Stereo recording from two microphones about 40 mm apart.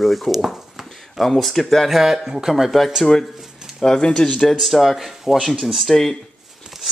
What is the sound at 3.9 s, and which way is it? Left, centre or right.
Speech, centre.